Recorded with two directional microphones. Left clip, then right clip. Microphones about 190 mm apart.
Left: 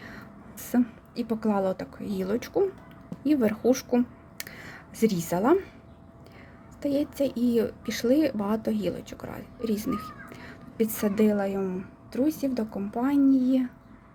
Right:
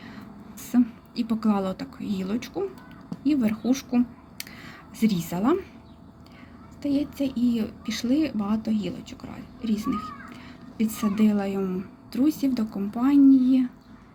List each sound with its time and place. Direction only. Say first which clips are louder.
0.0 s a sound: even; 25° left (ahead or behind)
0.7 s a woman's voice: right 3 dB; 20° left (ahead or behind)
6.8 s a woman's voice: left 1 dB; 25° left (ahead or behind)